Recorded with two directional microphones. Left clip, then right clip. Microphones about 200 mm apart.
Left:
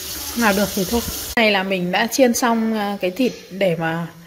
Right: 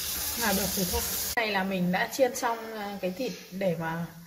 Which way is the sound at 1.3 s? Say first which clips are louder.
Left 12 dB; 50° left (ahead or behind).